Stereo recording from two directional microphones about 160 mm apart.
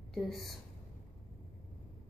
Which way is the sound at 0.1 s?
Centre (ahead or behind).